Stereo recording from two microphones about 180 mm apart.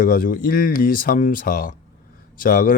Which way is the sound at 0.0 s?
50° left (ahead or behind).